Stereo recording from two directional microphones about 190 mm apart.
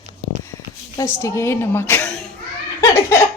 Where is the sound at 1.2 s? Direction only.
15° left (ahead or behind).